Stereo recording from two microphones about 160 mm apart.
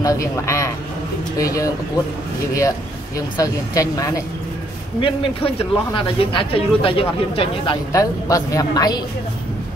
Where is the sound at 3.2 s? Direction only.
20° left (ahead or behind).